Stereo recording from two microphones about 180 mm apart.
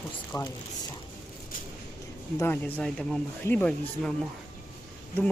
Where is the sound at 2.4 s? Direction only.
10° left (ahead or behind).